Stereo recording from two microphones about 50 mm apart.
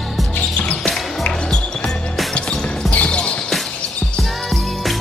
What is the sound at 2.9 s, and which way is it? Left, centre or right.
Basketball bounce, left.